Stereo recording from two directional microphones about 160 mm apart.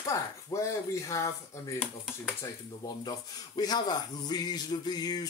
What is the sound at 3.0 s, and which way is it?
A man's voice, 25° left (ahead or behind).